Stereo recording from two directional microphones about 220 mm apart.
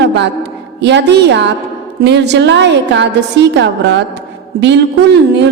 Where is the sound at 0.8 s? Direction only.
50° right (ahead or behind).